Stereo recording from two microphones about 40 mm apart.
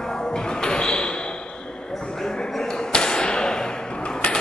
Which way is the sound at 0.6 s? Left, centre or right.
Left.